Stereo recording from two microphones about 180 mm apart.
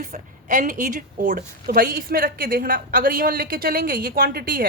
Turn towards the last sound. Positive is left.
turn(degrees=-55)  # may be behind; listen again after turning